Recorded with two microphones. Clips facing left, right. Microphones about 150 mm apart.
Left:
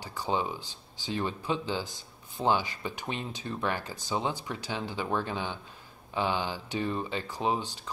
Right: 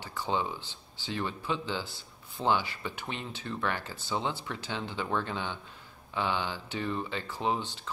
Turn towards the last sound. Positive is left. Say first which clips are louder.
# left 1 dB
turn(degrees=15)  # may be behind; listen again after turning